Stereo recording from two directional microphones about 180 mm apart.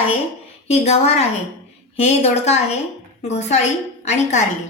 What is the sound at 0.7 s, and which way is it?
A woman's voice, 35° left (ahead or behind).